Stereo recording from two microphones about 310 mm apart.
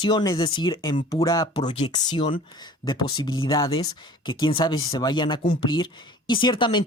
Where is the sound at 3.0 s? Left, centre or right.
Left.